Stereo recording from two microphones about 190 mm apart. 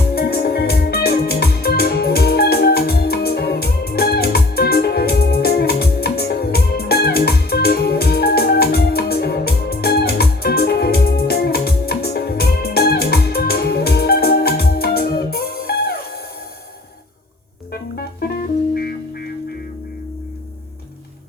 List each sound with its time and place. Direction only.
0.1 s music: 55° left (ahead or behind)
17.7 s music: 55° left (ahead or behind)